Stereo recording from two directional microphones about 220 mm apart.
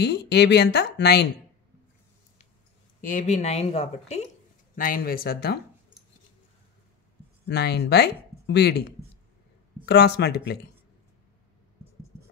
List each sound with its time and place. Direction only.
0.0 s speech: 50° left (ahead or behind)
3.0 s a woman's voice: 35° left (ahead or behind)
4.7 s speech: 40° left (ahead or behind)
7.4 s speech: 50° left (ahead or behind)